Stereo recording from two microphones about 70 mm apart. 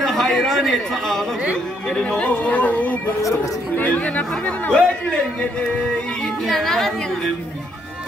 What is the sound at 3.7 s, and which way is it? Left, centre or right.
Speech, left.